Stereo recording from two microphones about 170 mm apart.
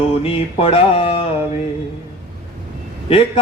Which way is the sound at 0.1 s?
35° left (ahead or behind).